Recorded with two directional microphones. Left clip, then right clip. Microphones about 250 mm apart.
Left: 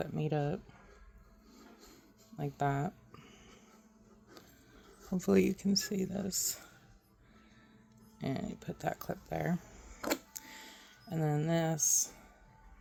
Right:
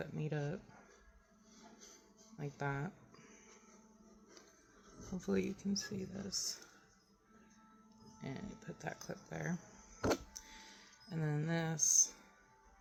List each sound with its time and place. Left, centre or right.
0.0 s speech: left
2.4 s speech: left
5.1 s speech: left
8.2 s speech: left
10.3 s a sound: left